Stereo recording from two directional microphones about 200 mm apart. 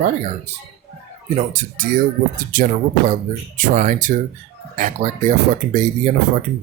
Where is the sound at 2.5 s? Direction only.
40° right (ahead or behind).